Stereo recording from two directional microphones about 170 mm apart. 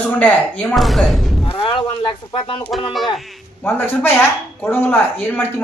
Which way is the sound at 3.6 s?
15° left (ahead or behind).